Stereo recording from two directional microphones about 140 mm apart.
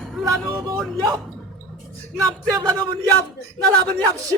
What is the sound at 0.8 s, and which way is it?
Speech, centre (ahead or behind).